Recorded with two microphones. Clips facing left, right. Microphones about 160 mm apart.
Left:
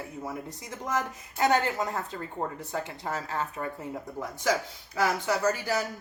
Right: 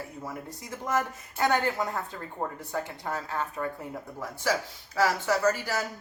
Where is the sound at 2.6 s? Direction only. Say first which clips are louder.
Even; 20° left (ahead or behind).